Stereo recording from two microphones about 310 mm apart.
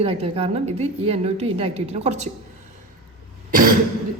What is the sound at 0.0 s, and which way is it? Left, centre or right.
A woman's voice, centre.